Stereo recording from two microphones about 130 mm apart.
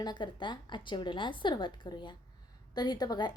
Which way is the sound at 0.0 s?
35° left (ahead or behind).